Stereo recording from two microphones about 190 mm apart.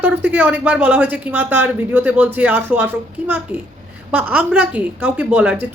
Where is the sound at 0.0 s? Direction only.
10° right (ahead or behind).